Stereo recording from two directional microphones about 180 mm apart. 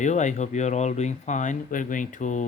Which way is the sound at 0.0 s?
40° left (ahead or behind).